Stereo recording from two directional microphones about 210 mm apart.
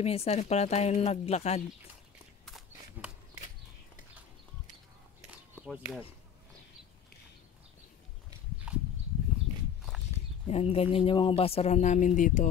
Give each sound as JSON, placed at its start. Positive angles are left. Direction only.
{"t": 0.0, "sound": "a woman's voice", "side_deg": 30}
{"t": 2.4, "sound": "a sound", "side_deg": 0}
{"t": 5.7, "sound": "speech", "side_deg": 0}
{"t": 10.4, "sound": "speech", "side_deg": 30}